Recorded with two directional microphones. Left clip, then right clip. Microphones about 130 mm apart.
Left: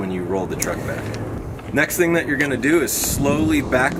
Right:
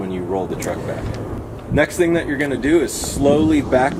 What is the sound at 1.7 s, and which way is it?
Speech, 30° left (ahead or behind).